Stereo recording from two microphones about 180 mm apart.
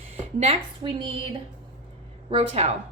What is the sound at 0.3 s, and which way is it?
Speech, 30° right (ahead or behind).